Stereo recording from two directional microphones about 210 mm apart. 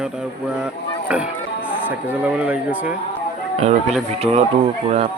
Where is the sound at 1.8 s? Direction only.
5° right (ahead or behind).